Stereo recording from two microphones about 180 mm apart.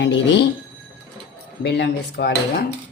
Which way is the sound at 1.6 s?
65° left (ahead or behind).